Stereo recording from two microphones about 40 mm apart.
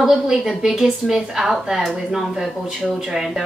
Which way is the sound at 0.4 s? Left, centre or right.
Centre.